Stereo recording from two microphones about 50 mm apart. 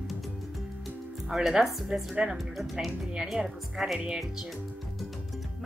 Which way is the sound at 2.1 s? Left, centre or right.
Centre.